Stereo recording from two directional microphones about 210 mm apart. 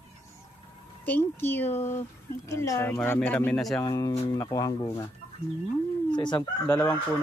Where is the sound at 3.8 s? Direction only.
15° left (ahead or behind).